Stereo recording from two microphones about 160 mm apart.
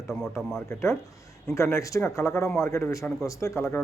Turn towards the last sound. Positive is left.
turn(degrees=15)  # may be behind; listen again after turning